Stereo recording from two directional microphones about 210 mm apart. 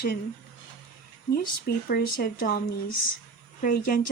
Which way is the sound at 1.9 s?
45° left (ahead or behind).